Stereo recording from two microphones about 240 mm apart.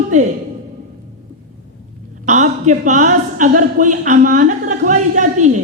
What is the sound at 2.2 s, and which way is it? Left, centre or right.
A woman's voice, right.